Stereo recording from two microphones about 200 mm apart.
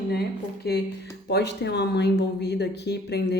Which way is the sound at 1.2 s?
55° left (ahead or behind).